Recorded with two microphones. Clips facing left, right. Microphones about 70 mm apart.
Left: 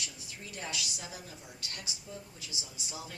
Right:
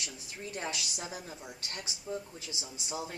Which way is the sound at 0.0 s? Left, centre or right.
Right.